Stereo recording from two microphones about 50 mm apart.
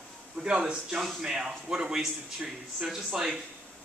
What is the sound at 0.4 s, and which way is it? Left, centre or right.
A man's voice, centre.